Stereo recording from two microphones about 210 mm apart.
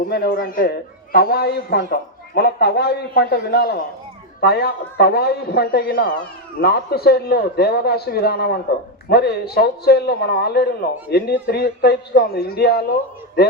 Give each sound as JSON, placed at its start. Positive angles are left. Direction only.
{"t": 0.1, "sound": "a man's voice", "side_deg": 45}